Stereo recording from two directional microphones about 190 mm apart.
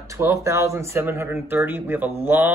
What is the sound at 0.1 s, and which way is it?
Speech, 15° right (ahead or behind).